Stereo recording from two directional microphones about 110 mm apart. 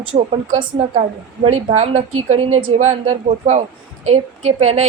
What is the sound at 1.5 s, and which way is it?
A woman's voice, 75° right (ahead or behind).